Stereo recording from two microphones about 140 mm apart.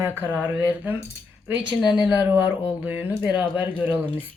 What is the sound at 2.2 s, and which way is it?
Speech, 10° right (ahead or behind).